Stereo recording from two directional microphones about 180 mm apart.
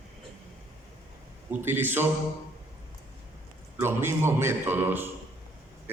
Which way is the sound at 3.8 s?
15° right (ahead or behind).